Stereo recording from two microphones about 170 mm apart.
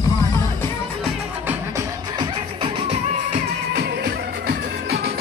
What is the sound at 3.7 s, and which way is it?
Music, 65° right (ahead or behind).